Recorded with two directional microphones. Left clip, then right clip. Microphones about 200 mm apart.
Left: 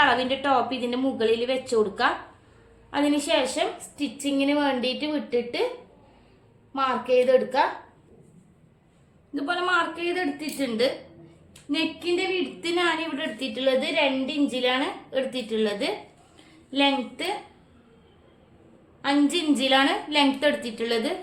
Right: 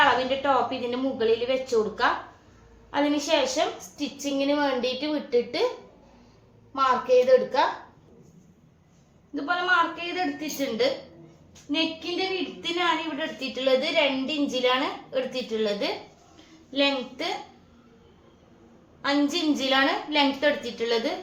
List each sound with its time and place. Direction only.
0.0 s a woman's voice: 50° left (ahead or behind)
6.7 s a woman's voice: 45° left (ahead or behind)
9.3 s a woman's voice: 55° left (ahead or behind)
13.5 s a woman's voice: 40° left (ahead or behind)
19.0 s a woman's voice: 45° left (ahead or behind)